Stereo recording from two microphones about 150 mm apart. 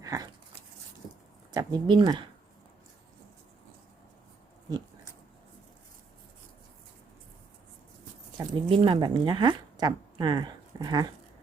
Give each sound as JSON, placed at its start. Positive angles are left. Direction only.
{"t": 0.0, "sound": "dog", "side_deg": -25}
{"t": 1.5, "sound": "speech", "side_deg": -30}
{"t": 8.4, "sound": "speech", "side_deg": -35}